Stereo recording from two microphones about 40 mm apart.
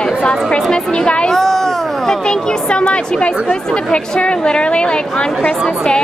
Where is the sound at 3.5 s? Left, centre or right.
Left.